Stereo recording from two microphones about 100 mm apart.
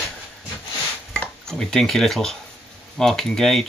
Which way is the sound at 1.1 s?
5° left (ahead or behind).